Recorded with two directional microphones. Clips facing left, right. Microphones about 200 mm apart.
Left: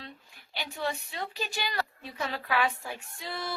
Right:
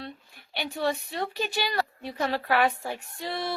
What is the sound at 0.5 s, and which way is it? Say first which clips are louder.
A woman's voice: right 5 dB; 60° right (ahead or behind).